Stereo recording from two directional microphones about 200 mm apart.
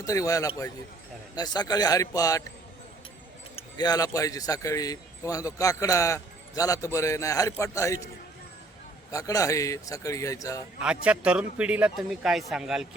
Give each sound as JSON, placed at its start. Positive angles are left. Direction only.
{"t": 0.0, "sound": "speech", "side_deg": 15}
{"t": 3.5, "sound": "speech", "side_deg": 20}
{"t": 9.1, "sound": "speech", "side_deg": 15}
{"t": 10.8, "sound": "a man's voice", "side_deg": -5}